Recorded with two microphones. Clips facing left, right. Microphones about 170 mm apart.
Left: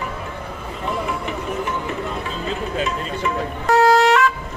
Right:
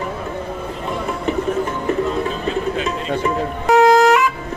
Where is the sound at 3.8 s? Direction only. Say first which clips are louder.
Right 3 dB; 15° right (ahead or behind).